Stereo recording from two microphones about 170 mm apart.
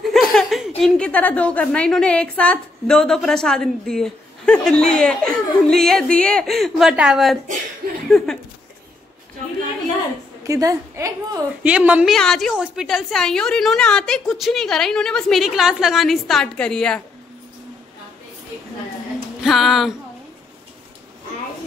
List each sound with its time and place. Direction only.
0.1 s a woman's voice: centre (ahead or behind)
10.4 s a woman's voice: 20° right (ahead or behind)
11.6 s a woman's voice: 5° right (ahead or behind)
19.4 s a woman's voice: centre (ahead or behind)